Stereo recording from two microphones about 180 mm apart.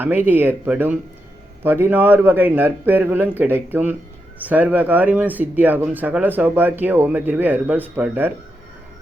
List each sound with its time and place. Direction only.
0.3 s speech: 10° right (ahead or behind)